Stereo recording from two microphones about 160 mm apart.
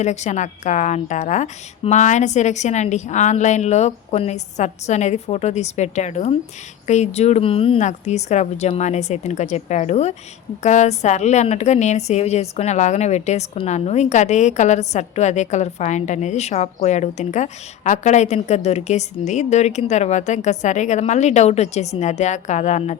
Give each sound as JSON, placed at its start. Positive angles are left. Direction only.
{"t": 0.0, "sound": "a woman's voice", "side_deg": 45}
{"t": 7.9, "sound": "a woman's voice", "side_deg": 45}